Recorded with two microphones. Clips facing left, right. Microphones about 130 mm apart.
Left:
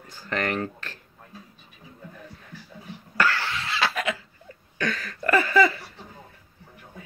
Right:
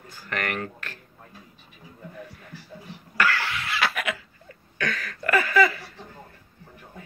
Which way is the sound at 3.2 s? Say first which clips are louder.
Even; 30° left (ahead or behind).